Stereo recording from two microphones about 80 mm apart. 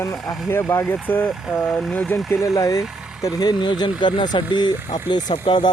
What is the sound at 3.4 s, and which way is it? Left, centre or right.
Speech, left.